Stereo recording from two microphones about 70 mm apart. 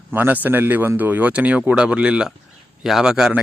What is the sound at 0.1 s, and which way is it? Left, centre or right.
Speech, right.